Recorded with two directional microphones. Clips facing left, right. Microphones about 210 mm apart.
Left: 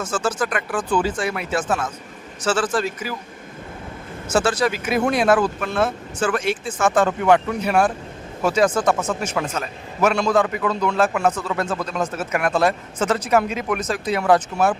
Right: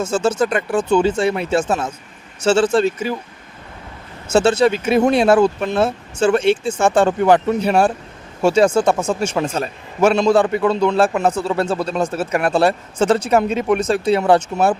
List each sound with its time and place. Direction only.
0.0 s speech: 25° right (ahead or behind)
4.3 s speech: 25° right (ahead or behind)